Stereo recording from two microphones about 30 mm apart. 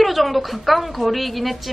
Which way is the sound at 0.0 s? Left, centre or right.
Centre.